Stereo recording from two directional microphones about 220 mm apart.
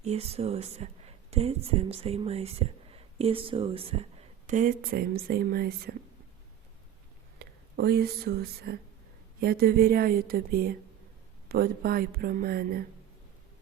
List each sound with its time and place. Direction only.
0.0 s speech: 30° right (ahead or behind)
7.3 s speech: 45° right (ahead or behind)